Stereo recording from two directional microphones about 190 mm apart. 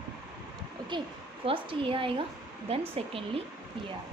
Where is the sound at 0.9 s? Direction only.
25° right (ahead or behind).